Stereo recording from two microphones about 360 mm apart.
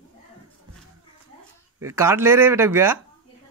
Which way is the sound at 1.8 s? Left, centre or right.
Centre.